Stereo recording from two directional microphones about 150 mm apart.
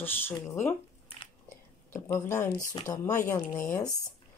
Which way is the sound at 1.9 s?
20° left (ahead or behind).